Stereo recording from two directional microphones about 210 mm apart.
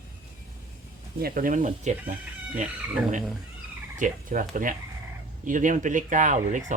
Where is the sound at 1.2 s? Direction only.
40° right (ahead or behind).